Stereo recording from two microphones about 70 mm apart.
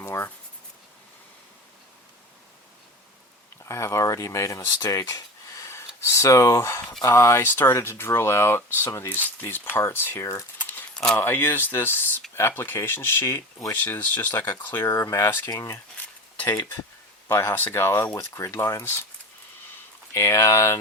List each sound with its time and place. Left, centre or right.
0.0 s writing: left
3.6 s speech: left
10.6 s a sound: left
10.9 s speech: centre
11.2 s speech: left
14.8 s speech: left
16.0 s stir: left
17.2 s speech: left
17.5 s speech: left
20.1 s speech: left